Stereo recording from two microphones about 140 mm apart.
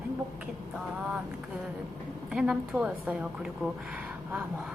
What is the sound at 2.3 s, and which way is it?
Speech, 5° right (ahead or behind).